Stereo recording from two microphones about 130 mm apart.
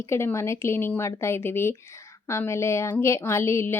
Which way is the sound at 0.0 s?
20° left (ahead or behind).